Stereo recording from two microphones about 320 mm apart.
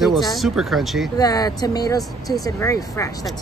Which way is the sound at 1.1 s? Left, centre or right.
Centre.